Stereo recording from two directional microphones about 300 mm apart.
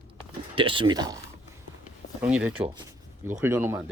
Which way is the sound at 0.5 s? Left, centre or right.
Centre.